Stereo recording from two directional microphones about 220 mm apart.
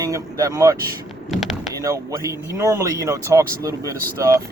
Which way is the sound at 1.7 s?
15° right (ahead or behind).